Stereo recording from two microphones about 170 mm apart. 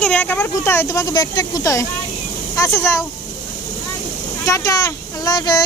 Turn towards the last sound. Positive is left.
turn(degrees=25)  # may be behind; listen again after turning